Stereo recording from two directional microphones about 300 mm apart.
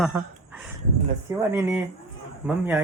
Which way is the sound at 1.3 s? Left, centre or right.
Centre.